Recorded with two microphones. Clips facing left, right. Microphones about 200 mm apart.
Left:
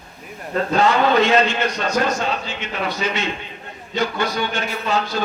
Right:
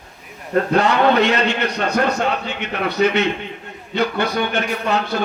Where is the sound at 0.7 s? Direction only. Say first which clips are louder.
Even; 60° right (ahead or behind).